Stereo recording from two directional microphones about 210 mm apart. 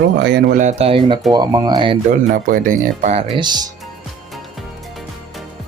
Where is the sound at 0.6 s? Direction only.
30° right (ahead or behind).